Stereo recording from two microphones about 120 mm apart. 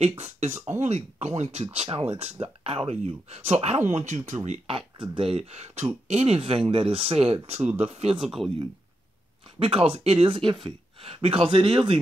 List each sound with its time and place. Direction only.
0.0 s speech: 60° right (ahead or behind)
4.6 s speech: 45° right (ahead or behind)
8.2 s speech: 5° right (ahead or behind)
9.6 s speech: 50° right (ahead or behind)